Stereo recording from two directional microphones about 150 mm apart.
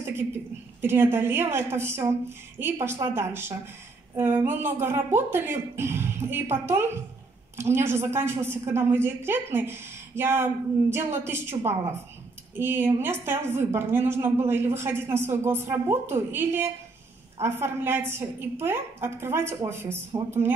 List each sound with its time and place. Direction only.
0.7 s a woman's voice: 15° right (ahead or behind)